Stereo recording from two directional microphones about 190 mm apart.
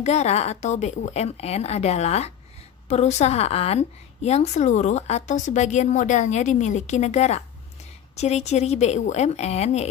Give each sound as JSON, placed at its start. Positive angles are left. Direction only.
{"t": 0.0, "sound": "a woman's voice", "side_deg": 35}